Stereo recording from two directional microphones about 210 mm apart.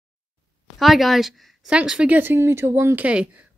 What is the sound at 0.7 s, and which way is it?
Speech, centre (ahead or behind).